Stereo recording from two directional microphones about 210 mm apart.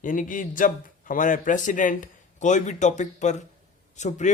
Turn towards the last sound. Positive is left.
turn(degrees=35)  # may be behind; listen again after turning